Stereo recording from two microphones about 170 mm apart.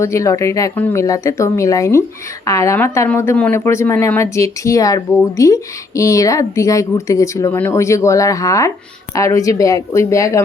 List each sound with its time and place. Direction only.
0.0 s speech: 20° left (ahead or behind)